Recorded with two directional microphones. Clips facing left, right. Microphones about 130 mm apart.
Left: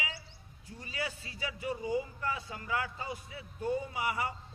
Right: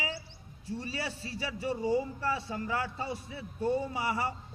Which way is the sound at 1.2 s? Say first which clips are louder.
Right 3 dB; 35° right (ahead or behind).